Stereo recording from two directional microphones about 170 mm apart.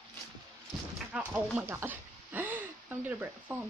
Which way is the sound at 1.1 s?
10° right (ahead or behind).